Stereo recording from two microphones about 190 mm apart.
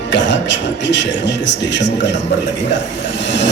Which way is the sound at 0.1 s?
70° left (ahead or behind).